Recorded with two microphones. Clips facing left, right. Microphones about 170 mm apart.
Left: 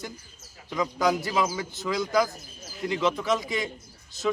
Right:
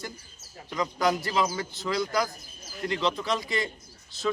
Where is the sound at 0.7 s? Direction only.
Centre (ahead or behind).